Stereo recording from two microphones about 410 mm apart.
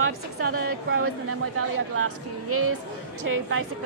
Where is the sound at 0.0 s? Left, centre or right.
Right.